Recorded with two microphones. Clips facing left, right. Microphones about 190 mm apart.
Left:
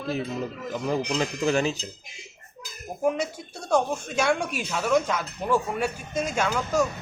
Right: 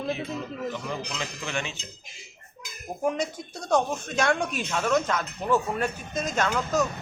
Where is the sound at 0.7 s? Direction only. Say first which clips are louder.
Left 7 dB; 40° left (ahead or behind).